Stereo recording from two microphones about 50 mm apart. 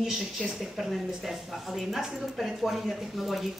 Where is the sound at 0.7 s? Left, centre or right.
Centre.